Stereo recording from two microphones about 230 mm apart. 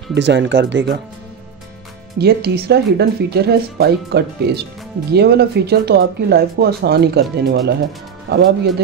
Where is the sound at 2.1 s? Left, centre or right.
Right.